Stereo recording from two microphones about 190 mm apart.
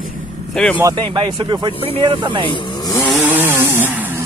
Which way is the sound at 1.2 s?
25° right (ahead or behind).